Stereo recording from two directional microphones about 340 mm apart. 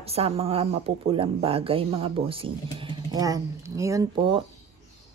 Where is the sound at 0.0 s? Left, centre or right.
Centre.